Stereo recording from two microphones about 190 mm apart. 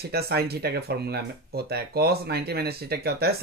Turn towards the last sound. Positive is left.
turn(degrees=-55)  # may be behind; listen again after turning